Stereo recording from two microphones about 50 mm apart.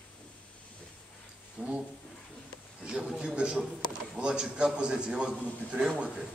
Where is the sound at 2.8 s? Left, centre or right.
Centre.